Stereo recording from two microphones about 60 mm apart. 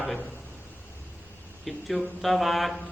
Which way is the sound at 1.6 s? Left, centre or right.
Centre.